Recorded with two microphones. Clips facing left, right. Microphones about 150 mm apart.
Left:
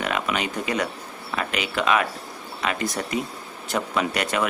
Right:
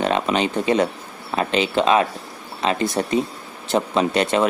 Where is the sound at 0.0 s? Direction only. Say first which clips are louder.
Right 6 dB; 30° right (ahead or behind).